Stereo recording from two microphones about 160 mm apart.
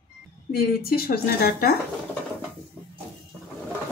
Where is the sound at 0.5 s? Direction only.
70° left (ahead or behind).